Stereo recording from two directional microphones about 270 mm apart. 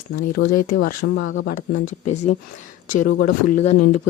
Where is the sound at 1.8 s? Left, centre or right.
Left.